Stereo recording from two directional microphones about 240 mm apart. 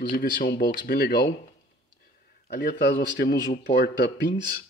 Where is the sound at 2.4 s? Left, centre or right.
Left.